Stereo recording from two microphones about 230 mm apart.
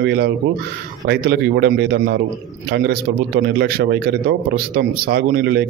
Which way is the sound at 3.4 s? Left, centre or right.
Right.